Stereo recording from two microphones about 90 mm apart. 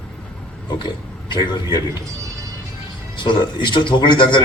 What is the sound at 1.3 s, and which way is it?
Speech, 60° left (ahead or behind).